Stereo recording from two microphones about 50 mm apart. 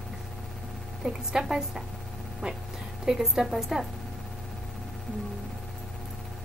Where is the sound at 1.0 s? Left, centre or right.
Centre.